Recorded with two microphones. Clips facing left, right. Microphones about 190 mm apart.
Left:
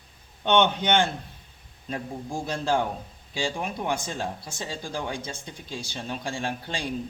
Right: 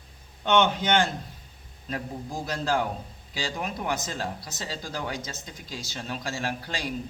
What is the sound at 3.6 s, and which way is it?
A man's voice, 25° left (ahead or behind).